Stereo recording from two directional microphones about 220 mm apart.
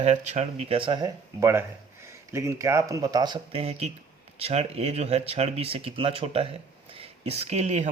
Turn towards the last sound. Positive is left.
turn(degrees=-30)  # may be behind; listen again after turning